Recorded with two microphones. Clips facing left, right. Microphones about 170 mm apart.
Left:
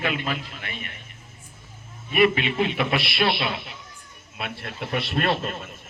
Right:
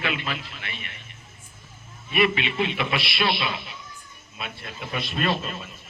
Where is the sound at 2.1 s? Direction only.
45° left (ahead or behind).